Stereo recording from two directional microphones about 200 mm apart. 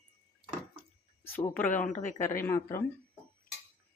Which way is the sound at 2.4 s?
10° left (ahead or behind).